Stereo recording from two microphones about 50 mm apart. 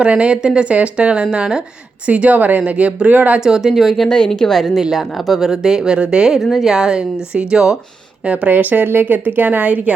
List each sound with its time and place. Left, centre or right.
0.0 s speech: right
3.4 s speech: centre
4.8 s speech: centre
6.3 s speech: centre
6.7 s speech: centre
8.2 s speech: right
8.5 s a woman's voice: right